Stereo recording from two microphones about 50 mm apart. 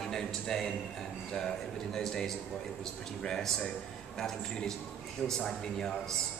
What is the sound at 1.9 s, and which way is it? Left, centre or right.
A man's voice, centre.